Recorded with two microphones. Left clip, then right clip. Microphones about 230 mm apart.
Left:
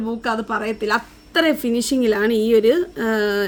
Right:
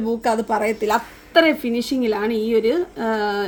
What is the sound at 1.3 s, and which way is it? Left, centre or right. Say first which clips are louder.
A woman's voice: right 2 dB; left.